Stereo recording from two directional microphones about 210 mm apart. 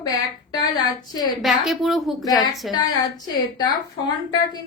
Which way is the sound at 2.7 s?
20° left (ahead or behind).